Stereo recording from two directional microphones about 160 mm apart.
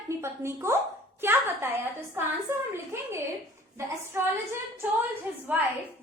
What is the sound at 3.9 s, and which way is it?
Speech, 15° right (ahead or behind).